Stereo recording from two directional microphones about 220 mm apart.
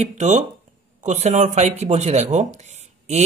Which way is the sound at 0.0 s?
30° right (ahead or behind).